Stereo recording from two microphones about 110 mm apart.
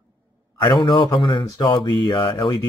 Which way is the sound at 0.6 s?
45° left (ahead or behind).